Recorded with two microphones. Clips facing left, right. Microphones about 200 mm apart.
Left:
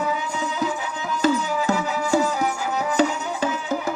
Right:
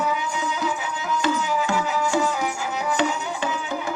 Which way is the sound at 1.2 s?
40° left (ahead or behind).